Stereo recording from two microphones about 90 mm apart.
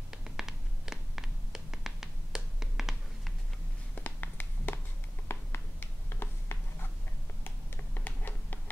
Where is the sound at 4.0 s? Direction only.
20° left (ahead or behind).